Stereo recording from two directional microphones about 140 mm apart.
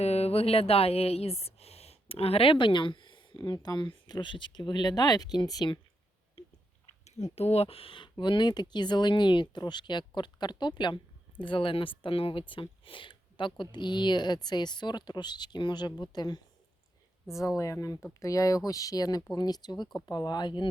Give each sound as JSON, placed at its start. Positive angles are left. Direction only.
{"t": 0.0, "sound": "speech", "side_deg": 50}
{"t": 7.3, "sound": "speech", "side_deg": 45}
{"t": 17.6, "sound": "speech", "side_deg": 25}